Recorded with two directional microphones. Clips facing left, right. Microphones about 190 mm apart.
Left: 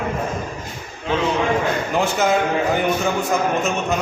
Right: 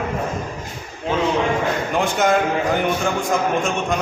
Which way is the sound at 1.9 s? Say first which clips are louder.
Right 1 dB; centre (ahead or behind).